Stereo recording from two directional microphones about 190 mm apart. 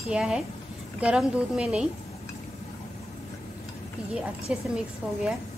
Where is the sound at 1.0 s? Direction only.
5° right (ahead or behind).